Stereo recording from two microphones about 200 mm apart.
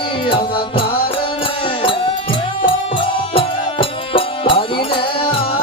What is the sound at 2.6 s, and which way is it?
Music, 25° left (ahead or behind).